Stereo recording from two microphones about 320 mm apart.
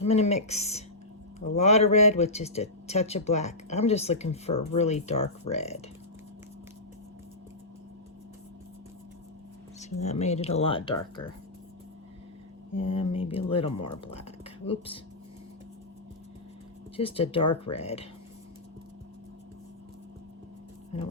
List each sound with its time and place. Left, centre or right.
0.0 s a man's voice: centre
9.8 s a man's voice: left
12.7 s a man's voice: centre
17.0 s a man's voice: centre